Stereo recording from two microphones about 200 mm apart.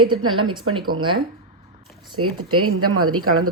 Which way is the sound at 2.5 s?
90° right.